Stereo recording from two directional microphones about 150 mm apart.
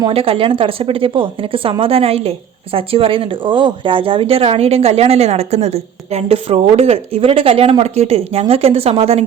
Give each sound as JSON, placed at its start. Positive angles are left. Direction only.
{"t": 0.1, "sound": "speech", "side_deg": -40}